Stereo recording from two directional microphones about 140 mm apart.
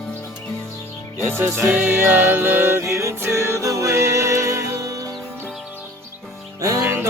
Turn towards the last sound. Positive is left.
turn(degrees=-15)  # may be behind; listen again after turning